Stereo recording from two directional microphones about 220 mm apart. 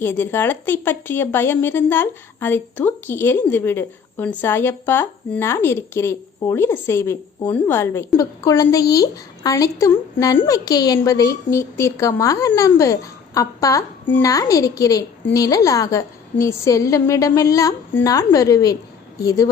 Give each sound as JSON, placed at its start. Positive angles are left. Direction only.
{"t": 0.0, "sound": "a woman's voice", "side_deg": 10}